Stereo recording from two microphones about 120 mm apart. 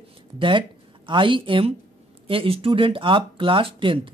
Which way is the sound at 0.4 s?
45° right (ahead or behind).